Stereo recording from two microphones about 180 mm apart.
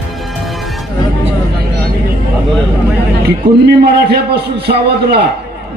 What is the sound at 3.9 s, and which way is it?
A man's voice, 65° right (ahead or behind).